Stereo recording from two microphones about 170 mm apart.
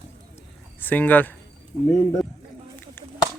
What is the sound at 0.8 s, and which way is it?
Speech, 10° left (ahead or behind).